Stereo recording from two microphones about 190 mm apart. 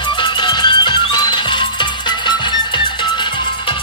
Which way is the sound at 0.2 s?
25° left (ahead or behind).